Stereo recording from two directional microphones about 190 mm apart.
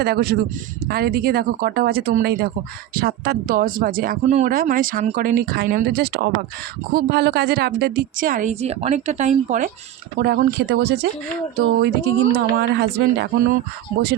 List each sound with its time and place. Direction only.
0.0 s speech: 55° right (ahead or behind); by 9.6 s 40° right (ahead or behind)
10.2 s speech: 55° right (ahead or behind)